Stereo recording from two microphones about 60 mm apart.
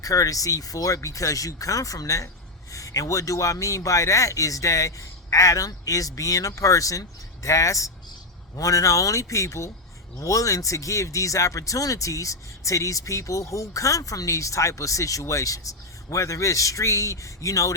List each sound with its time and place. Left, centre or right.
0.0 s speech: left